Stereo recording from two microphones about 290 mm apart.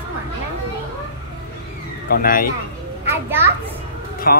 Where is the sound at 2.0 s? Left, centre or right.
Left.